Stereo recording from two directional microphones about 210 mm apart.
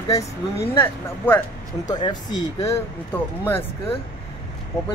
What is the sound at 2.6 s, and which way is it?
Speech, 10° left (ahead or behind).